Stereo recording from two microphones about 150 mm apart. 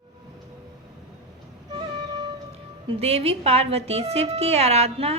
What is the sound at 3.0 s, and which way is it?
A woman's voice, 40° right (ahead or behind).